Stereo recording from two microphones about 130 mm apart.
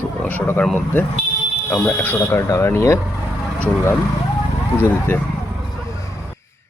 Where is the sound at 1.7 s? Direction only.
10° left (ahead or behind).